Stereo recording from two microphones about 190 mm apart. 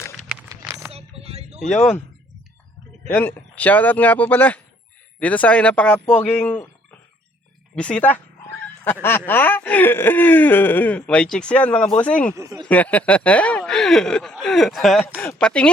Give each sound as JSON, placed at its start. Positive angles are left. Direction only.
{"t": 0.5, "sound": "a sound", "side_deg": -10}
{"t": 0.9, "sound": "a sound", "side_deg": -30}
{"t": 3.1, "sound": "speech", "side_deg": 10}
{"t": 7.8, "sound": "speech", "side_deg": 5}
{"t": 12.3, "sound": "speech", "side_deg": -15}
{"t": 12.6, "sound": "speech", "side_deg": 5}